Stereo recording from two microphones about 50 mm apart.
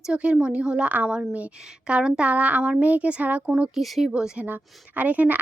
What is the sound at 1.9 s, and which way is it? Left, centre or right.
A woman's voice, centre.